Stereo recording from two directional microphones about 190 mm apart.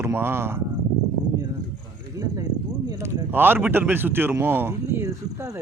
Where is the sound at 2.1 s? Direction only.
20° right (ahead or behind).